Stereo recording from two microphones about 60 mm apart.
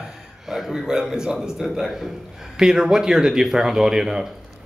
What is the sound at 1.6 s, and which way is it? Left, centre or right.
A man's voice, centre.